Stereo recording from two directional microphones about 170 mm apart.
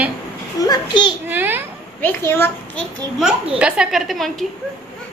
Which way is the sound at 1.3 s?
10° right (ahead or behind).